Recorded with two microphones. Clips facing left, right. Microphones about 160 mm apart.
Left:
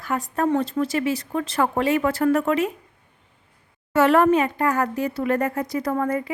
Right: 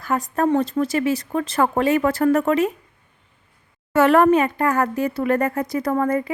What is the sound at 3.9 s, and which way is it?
Speech, 55° right (ahead or behind).